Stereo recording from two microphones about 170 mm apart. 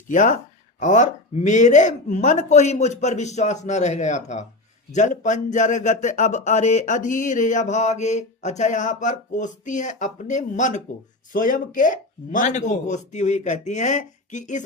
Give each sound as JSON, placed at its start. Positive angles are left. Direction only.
{"t": 0.1, "sound": "speech", "side_deg": 50}